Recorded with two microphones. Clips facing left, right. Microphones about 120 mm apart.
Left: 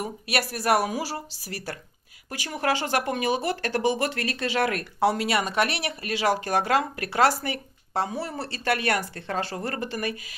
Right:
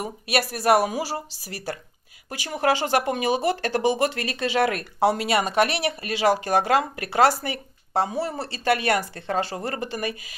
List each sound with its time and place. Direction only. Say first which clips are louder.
0.0 s speech: right 3 dB; 20° right (ahead or behind)